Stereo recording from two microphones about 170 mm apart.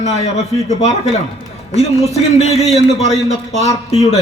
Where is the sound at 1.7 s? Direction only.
40° left (ahead or behind).